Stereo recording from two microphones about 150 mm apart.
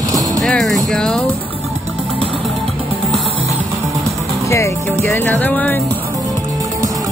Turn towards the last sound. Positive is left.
turn(degrees=10)  # may be behind; listen again after turning